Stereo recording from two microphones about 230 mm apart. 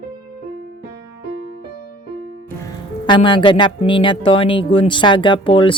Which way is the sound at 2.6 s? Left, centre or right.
Centre.